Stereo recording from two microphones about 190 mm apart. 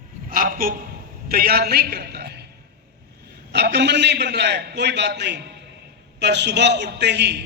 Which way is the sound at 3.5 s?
60° right (ahead or behind).